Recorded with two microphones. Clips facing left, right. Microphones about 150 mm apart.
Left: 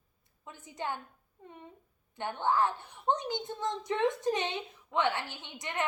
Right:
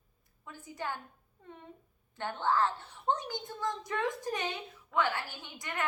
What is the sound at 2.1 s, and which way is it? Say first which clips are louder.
A woman's voice: left 1 dB; 15° left (ahead or behind).